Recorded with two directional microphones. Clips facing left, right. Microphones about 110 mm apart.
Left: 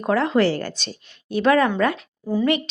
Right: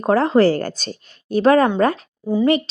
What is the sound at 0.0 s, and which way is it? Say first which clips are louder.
Speech: right 4 dB; 35° right (ahead or behind).